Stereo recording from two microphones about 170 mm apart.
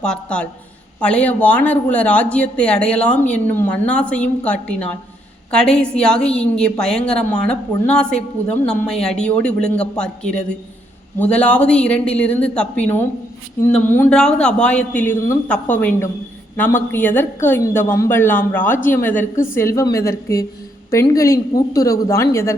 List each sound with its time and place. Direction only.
0.0 s a woman's voice: 5° left (ahead or behind)